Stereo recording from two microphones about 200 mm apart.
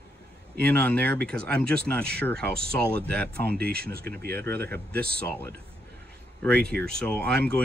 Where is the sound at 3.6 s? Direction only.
50° right (ahead or behind).